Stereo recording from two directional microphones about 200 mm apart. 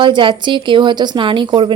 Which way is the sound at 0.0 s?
25° right (ahead or behind).